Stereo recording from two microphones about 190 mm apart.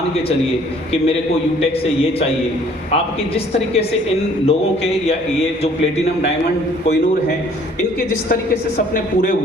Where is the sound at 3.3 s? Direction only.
30° left (ahead or behind).